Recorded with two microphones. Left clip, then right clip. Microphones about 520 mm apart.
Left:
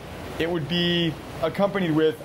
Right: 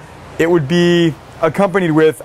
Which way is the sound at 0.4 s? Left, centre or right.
Right.